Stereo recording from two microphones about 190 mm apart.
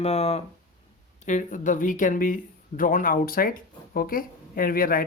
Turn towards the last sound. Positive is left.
turn(degrees=50)  # may be behind; listen again after turning